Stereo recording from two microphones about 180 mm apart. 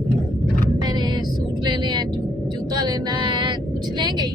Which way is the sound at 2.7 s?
20° right (ahead or behind).